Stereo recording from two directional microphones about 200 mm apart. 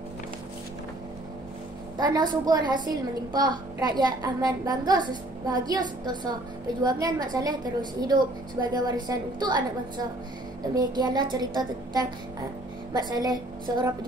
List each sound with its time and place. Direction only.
2.0 s a woman's voice: 20° right (ahead or behind)